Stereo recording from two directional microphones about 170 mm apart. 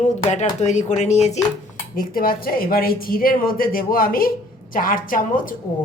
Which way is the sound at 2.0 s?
60° left (ahead or behind).